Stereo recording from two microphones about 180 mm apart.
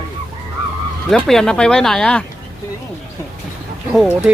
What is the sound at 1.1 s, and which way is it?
Speech, 5° left (ahead or behind).